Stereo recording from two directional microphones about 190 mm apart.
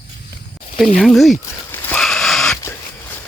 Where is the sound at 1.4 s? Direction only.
10° left (ahead or behind).